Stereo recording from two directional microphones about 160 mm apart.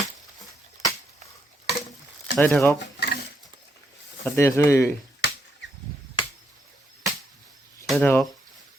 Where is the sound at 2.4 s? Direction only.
10° left (ahead or behind).